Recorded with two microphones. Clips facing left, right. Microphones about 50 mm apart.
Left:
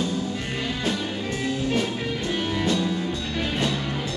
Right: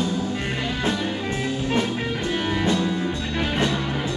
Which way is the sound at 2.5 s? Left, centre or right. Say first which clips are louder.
Right 2 dB; centre.